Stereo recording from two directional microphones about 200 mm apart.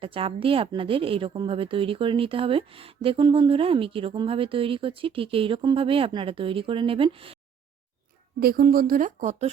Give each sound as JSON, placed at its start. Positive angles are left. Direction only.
{"t": 0.0, "sound": "speech", "side_deg": -25}
{"t": 8.4, "sound": "speech", "side_deg": -50}